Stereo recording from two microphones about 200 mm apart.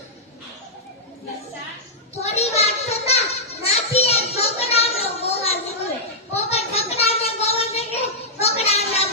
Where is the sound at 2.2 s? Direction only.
30° left (ahead or behind).